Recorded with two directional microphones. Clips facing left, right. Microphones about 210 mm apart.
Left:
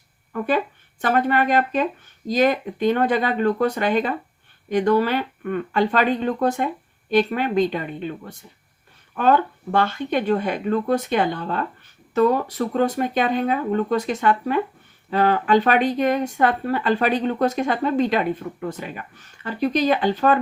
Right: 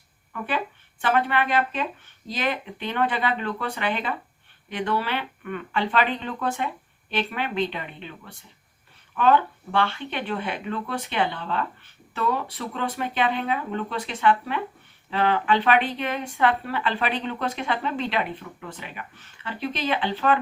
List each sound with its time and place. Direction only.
0.3 s speech: 40° left (ahead or behind)